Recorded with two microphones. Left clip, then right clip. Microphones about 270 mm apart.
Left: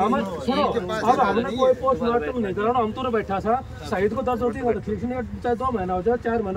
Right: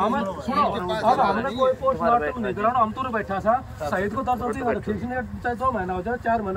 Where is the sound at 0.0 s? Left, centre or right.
Centre.